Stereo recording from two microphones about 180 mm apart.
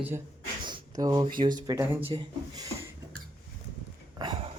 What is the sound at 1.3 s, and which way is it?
Speech, 25° right (ahead or behind).